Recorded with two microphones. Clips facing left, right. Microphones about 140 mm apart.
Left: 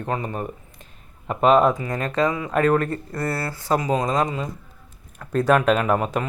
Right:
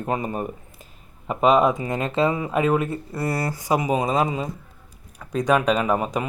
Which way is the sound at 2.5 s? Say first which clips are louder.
Left 1 dB; 10° right (ahead or behind).